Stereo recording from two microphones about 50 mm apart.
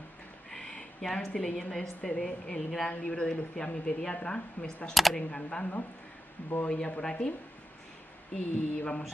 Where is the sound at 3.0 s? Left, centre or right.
Left.